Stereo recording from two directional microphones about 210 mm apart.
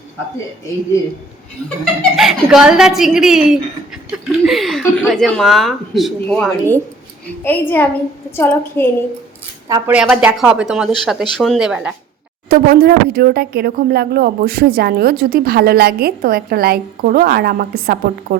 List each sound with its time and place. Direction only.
1.8 s a woman's voice: centre (ahead or behind)
9.6 s speech: 10° right (ahead or behind)
12.5 s speech: 50° right (ahead or behind)